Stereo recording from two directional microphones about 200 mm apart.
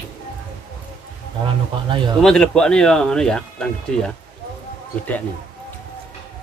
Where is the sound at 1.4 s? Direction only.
25° right (ahead or behind).